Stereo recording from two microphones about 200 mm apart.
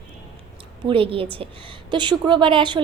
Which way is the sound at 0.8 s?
25° right (ahead or behind).